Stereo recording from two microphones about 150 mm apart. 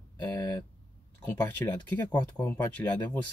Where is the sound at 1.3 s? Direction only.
15° left (ahead or behind).